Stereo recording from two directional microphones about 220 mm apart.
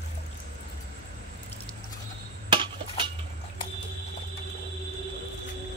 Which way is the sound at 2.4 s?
20° right (ahead or behind).